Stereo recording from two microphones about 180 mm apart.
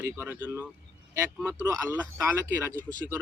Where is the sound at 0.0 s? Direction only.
15° right (ahead or behind).